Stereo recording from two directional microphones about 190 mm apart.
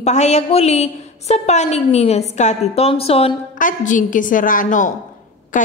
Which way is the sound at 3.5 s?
45° left (ahead or behind).